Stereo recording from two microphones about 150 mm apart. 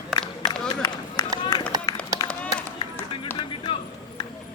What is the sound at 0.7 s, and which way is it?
Run, 25° left (ahead or behind).